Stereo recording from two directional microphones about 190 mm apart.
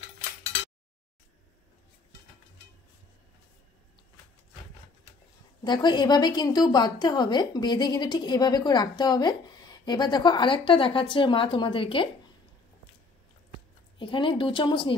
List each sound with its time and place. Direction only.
5.6 s a woman's voice: 25° left (ahead or behind)
13.9 s a woman's voice: 25° left (ahead or behind)